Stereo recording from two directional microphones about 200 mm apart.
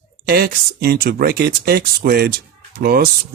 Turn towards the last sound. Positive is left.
turn(degrees=-50)  # may be behind; listen again after turning